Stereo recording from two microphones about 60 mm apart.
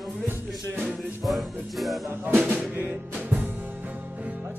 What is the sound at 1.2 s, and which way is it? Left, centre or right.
Music, centre.